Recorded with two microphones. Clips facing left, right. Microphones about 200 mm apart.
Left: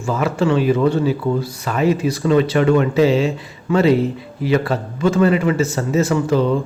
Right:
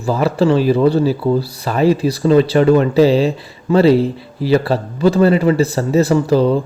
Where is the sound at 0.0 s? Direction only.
35° right (ahead or behind).